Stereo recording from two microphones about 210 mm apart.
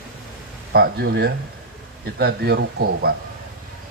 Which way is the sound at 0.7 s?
50° right (ahead or behind).